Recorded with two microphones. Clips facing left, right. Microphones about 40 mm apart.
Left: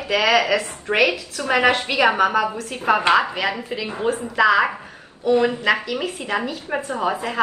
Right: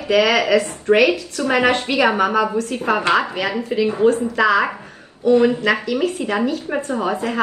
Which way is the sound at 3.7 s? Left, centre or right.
Centre.